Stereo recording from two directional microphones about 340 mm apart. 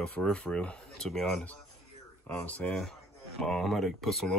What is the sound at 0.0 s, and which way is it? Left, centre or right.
Speech, centre.